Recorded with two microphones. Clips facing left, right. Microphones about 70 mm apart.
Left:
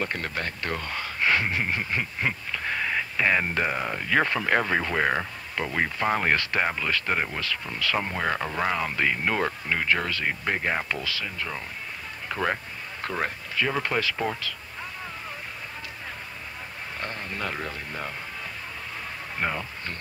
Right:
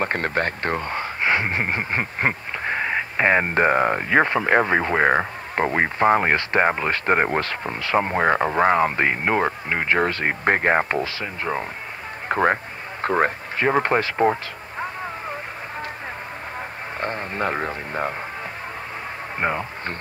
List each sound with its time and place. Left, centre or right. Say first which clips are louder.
0.0 s speech: right 7 dB; right
4.1 s speech: right 3 dB; right
7.8 s speech: right 8 dB; right
17.0 s speech: right 8 dB; right
19.4 s speech: right 5 dB; right